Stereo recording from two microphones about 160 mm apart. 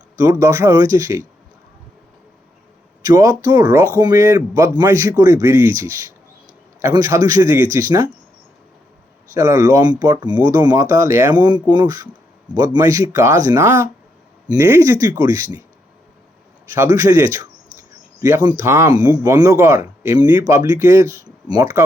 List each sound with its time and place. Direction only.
0.2 s speech: 20° right (ahead or behind)
3.0 s speech: 20° right (ahead or behind)
9.3 s speech: 20° right (ahead or behind)
16.7 s speech: 15° right (ahead or behind)